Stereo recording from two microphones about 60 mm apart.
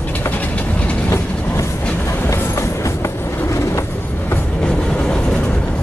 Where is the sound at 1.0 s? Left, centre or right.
Left.